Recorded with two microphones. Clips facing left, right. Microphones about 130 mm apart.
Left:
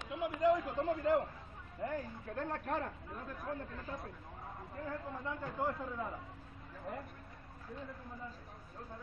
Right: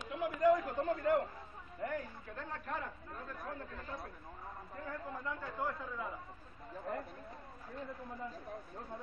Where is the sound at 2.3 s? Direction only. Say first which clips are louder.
Left 5 dB; 55° left (ahead or behind).